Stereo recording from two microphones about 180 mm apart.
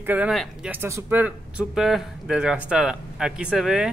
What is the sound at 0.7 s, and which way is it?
Speech, 15° right (ahead or behind).